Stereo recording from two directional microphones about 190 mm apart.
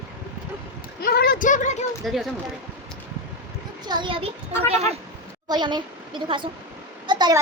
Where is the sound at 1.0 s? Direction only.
55° left (ahead or behind).